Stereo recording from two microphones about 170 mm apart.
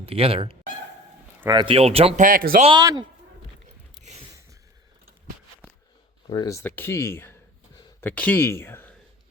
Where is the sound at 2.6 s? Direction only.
25° right (ahead or behind).